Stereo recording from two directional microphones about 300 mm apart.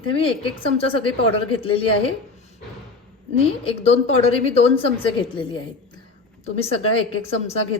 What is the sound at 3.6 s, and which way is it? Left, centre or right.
A woman's voice, centre.